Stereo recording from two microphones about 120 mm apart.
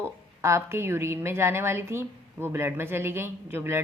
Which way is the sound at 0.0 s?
20° right (ahead or behind).